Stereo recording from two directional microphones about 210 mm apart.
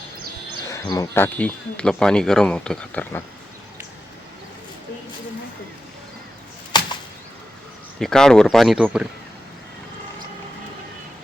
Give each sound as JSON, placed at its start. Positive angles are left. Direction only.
{"t": 0.7, "sound": "speech", "side_deg": 15}
{"t": 6.7, "sound": "whip", "side_deg": 20}
{"t": 7.9, "sound": "speech", "side_deg": 5}